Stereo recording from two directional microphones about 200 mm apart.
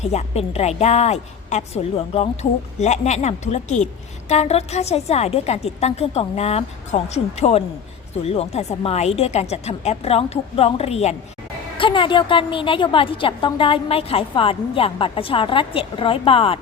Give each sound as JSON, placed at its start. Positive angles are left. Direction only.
{"t": 0.0, "sound": "a woman's voice", "side_deg": 35}